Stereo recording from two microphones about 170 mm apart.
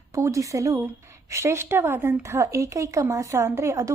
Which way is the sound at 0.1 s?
20° right (ahead or behind).